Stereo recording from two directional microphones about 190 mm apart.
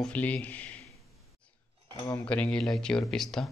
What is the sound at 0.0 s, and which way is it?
Speech, 10° left (ahead or behind).